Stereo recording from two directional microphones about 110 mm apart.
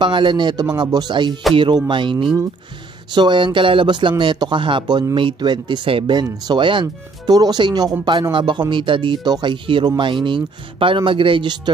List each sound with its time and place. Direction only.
0.0 s speech: 45° right (ahead or behind)